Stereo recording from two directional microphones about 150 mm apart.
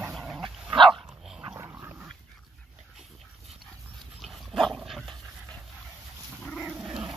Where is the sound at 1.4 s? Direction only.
20° right (ahead or behind).